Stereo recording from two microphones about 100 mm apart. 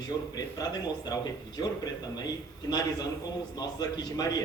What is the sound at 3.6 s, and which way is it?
Speech, 40° left (ahead or behind).